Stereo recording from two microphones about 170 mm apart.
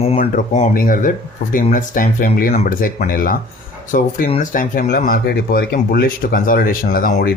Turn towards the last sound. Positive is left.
turn(degrees=50)  # may be behind; listen again after turning